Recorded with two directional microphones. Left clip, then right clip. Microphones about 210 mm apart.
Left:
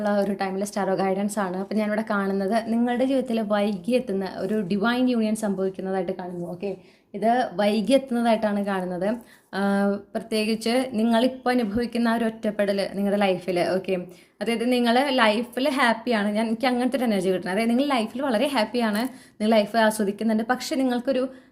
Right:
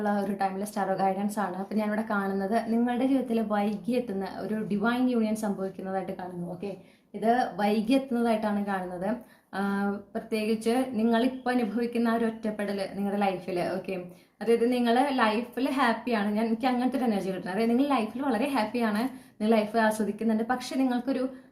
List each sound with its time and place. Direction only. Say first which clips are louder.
0.0 s a woman's voice: left 4 dB; 35° left (ahead or behind)
7.2 s a woman's voice: left 4 dB; 35° left (ahead or behind)